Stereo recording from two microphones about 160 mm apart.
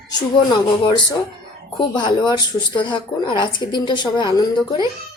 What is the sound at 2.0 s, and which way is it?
A woman's voice, 30° left (ahead or behind).